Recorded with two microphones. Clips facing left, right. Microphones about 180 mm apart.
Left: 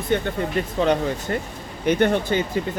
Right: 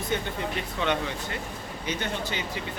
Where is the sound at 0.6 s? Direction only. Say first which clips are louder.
Left 9 dB; 40° left (ahead or behind).